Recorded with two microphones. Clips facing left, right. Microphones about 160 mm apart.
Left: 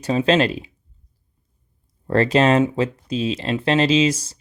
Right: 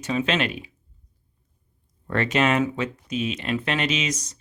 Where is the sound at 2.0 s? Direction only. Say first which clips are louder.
Left 6 dB; 35° left (ahead or behind).